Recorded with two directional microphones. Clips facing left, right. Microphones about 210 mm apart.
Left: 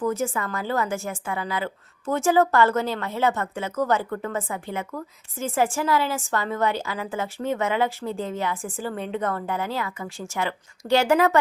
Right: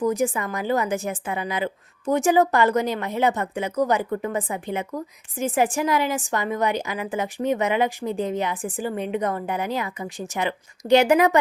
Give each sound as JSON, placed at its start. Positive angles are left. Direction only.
{"t": 0.0, "sound": "a woman's voice", "side_deg": -15}